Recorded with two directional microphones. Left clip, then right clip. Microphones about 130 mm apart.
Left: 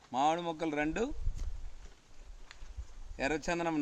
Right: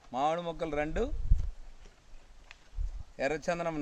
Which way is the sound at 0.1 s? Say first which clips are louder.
Even; 25° right (ahead or behind).